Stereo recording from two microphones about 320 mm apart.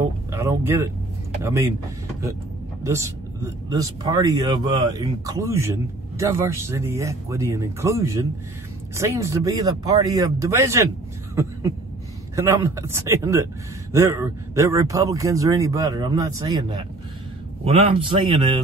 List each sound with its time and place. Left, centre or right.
0.3 s speech: centre
2.8 s speech: centre
12.4 s speech: centre